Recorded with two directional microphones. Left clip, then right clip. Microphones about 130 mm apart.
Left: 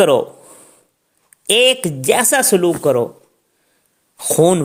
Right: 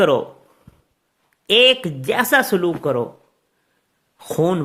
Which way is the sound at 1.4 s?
45° left (ahead or behind).